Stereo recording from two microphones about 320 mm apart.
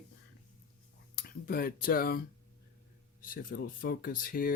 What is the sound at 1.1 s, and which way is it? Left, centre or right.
Speech, left.